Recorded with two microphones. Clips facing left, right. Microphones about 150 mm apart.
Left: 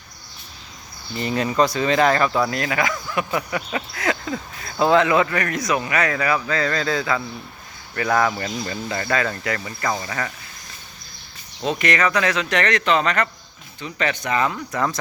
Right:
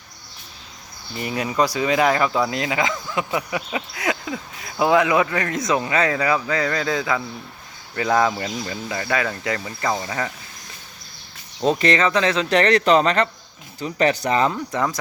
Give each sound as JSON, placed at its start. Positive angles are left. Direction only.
{"t": 1.2, "sound": "speech", "side_deg": -10}
{"t": 9.4, "sound": "speech", "side_deg": -20}
{"t": 11.6, "sound": "speech", "side_deg": -35}
{"t": 14.7, "sound": "speech", "side_deg": -15}